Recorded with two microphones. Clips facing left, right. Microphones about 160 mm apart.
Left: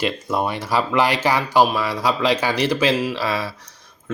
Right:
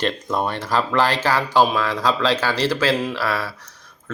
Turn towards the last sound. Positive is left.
turn(degrees=15)  # may be behind; listen again after turning